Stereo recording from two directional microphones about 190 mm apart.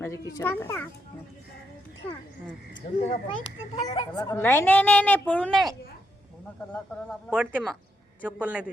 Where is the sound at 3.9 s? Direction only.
20° left (ahead or behind).